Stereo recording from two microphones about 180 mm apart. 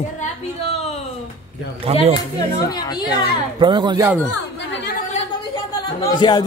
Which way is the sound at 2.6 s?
20° left (ahead or behind).